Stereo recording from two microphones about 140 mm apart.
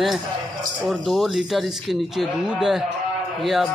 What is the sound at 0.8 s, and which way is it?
A man's voice, centre (ahead or behind).